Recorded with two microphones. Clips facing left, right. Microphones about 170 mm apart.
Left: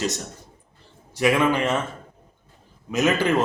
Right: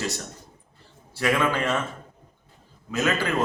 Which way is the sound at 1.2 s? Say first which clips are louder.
Left 4 dB; 15° left (ahead or behind).